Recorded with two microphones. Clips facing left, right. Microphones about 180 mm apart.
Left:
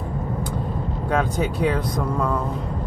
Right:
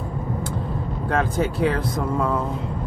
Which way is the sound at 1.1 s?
Centre (ahead or behind).